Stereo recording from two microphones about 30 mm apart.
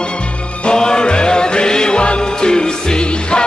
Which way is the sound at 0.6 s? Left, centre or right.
Left.